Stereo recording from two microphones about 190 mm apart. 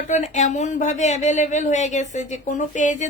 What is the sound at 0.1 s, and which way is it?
Speech, 40° left (ahead or behind).